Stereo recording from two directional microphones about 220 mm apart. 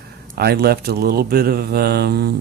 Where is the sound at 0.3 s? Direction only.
45° right (ahead or behind).